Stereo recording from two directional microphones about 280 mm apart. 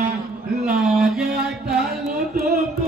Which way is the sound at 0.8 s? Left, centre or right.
Centre.